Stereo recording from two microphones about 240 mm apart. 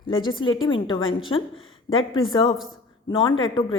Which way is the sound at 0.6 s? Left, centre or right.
Centre.